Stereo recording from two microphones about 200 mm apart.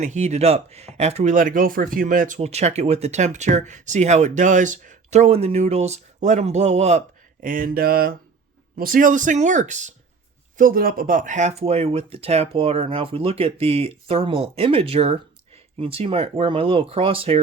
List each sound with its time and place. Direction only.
0.0 s speech: 35° right (ahead or behind)
7.4 s speech: 45° right (ahead or behind); by 17.4 s 30° right (ahead or behind)